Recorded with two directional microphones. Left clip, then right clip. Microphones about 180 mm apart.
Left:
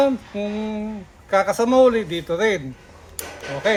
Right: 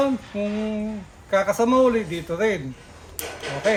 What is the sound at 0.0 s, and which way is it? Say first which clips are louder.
A man's voice: left 3 dB; 15° left (ahead or behind).